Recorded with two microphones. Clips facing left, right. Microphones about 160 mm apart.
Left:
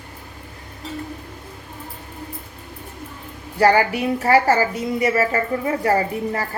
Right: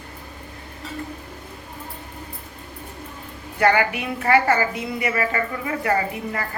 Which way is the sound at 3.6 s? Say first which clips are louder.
Left 3 dB; 35° left (ahead or behind).